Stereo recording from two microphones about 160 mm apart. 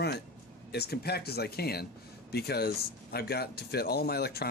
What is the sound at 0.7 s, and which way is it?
Speech, 85° left.